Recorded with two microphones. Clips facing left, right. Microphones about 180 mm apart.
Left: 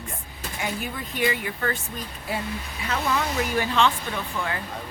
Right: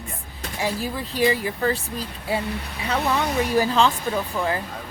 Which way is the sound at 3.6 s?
35° right (ahead or behind).